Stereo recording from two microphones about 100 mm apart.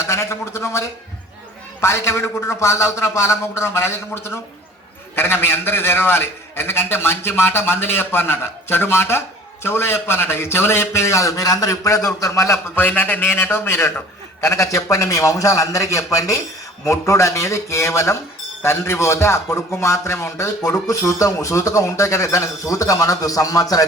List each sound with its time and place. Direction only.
0.0 s a man's voice: 25° left (ahead or behind)